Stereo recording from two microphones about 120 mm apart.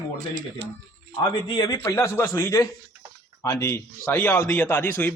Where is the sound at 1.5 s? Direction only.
35° left (ahead or behind).